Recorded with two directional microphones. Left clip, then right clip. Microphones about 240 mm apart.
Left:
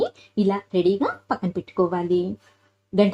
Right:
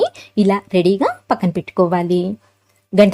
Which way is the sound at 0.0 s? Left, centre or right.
Right.